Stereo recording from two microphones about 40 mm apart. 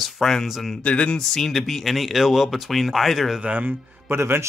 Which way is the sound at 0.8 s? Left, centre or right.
Left.